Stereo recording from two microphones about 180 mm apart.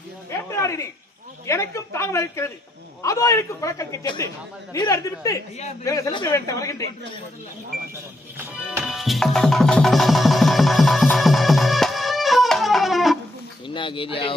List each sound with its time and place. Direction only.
0.3 s a sound: 15° left (ahead or behind)
1.5 s a man's voice: 15° left (ahead or behind)
8.8 s music: centre (ahead or behind)
13.7 s speech: 30° left (ahead or behind)